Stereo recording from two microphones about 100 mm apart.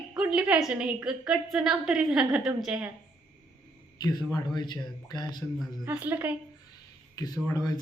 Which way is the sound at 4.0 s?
45° left (ahead or behind).